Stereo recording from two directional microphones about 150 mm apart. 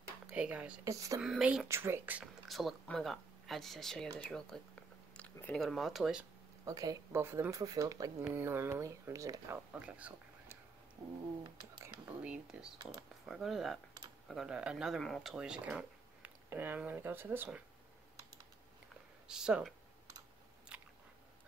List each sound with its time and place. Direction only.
0.3 s speech: 10° right (ahead or behind)
0.8 s speech: 20° right (ahead or behind)
1.2 s speech: 5° right (ahead or behind)
1.7 s speech: 15° right (ahead or behind)
2.4 s speech: centre (ahead or behind)
6.6 s speech: 25° right (ahead or behind)
9.7 s speech: 10° right (ahead or behind)
11.9 s speech: 5° right (ahead or behind)
19.2 s speech: 5° right (ahead or behind)
20.7 s biting: 5° right (ahead or behind)